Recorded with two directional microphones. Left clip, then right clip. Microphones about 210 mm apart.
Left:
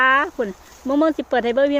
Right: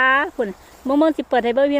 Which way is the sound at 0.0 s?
5° right (ahead or behind).